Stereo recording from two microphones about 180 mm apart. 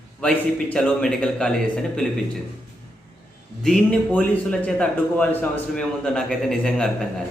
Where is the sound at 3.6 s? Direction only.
5° left (ahead or behind).